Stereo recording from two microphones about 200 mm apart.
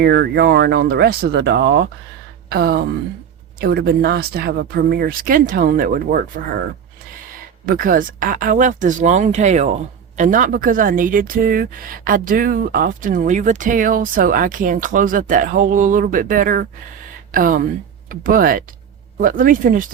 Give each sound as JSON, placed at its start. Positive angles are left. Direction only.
{"t": 0.0, "sound": "speech", "side_deg": -55}
{"t": 7.6, "sound": "speech", "side_deg": -45}